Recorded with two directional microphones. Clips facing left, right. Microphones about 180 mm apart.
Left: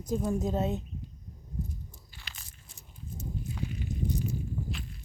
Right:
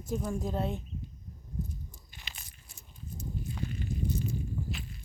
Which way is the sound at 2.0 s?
15° right (ahead or behind).